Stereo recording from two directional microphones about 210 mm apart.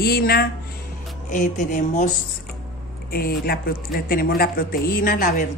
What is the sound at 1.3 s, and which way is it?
Music, 40° left (ahead or behind).